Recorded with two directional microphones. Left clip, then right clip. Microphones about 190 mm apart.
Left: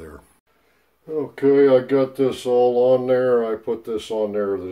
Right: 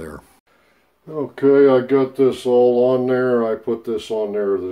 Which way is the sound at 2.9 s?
30° right (ahead or behind).